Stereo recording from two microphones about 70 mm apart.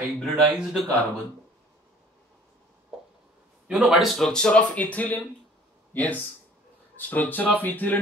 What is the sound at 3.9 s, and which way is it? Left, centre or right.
Speech, centre.